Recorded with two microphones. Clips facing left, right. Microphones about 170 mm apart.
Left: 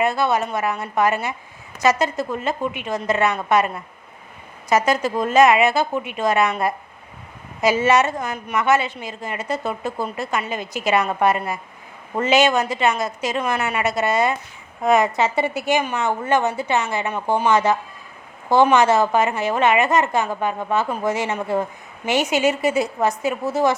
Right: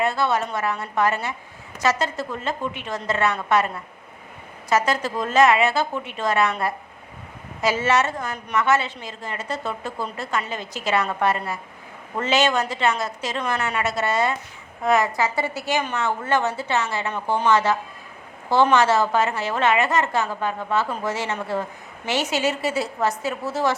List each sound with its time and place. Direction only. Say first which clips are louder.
0.0 s a woman's voice: left 2 dB; 10° left (ahead or behind)
4.7 s a woman's voice: left 3 dB; 15° left (ahead or behind)